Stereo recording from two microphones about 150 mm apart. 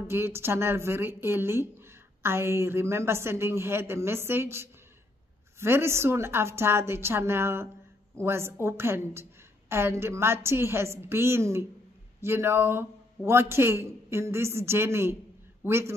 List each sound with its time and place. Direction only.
0.0 s a woman's voice: 15° right (ahead or behind)